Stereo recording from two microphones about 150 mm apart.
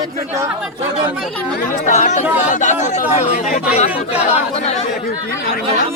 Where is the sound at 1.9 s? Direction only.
55° left (ahead or behind).